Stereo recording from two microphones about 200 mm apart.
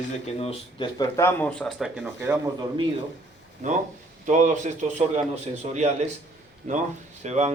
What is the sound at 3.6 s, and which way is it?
A man's voice, 40° right (ahead or behind).